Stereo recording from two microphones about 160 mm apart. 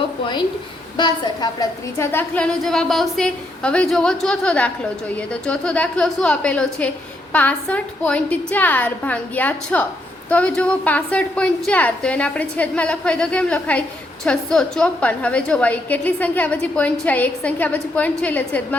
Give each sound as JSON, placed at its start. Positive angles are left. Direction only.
{"t": 0.9, "sound": "a woman's voice", "side_deg": 25}
{"t": 2.1, "sound": "a woman's voice", "side_deg": 5}